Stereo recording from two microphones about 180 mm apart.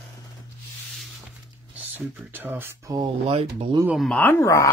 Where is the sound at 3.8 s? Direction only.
Centre (ahead or behind).